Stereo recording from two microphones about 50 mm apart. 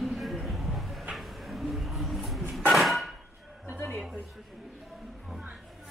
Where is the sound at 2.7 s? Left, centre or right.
Centre.